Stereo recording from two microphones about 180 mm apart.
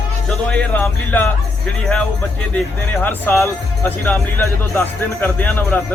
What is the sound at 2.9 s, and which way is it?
A man's voice, 10° left (ahead or behind).